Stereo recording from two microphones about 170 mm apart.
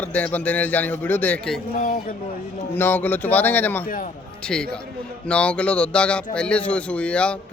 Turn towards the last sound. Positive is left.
turn(degrees=5)  # may be behind; listen again after turning